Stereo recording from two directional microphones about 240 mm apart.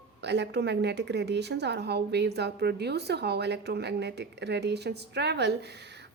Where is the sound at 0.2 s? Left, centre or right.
Right.